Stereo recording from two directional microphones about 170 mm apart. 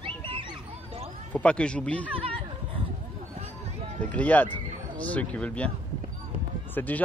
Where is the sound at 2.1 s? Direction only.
30° right (ahead or behind).